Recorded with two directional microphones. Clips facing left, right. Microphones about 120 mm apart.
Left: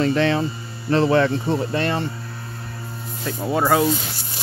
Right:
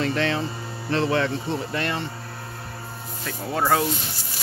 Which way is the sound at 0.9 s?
45° left (ahead or behind).